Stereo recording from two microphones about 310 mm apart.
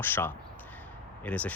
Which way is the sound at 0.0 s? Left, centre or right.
Centre.